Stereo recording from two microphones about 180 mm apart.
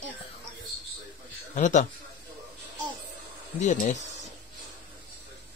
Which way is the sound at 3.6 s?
40° left (ahead or behind).